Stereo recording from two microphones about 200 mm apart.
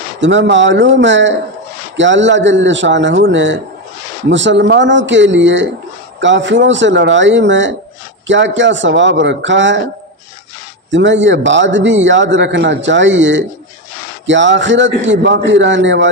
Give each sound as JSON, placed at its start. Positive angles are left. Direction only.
{"t": 0.2, "sound": "a man's voice", "side_deg": -65}
{"t": 10.9, "sound": "a man's voice", "side_deg": -65}